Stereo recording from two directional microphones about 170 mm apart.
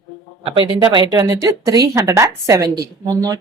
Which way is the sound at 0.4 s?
30° right (ahead or behind).